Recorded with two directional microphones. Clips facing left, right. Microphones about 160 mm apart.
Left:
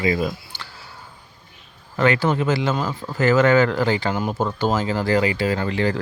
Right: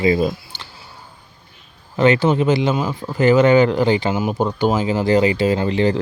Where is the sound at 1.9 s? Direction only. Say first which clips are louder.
Right 4 dB; 20° right (ahead or behind).